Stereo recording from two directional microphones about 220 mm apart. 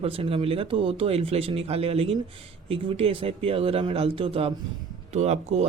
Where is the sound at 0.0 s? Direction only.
25° right (ahead or behind).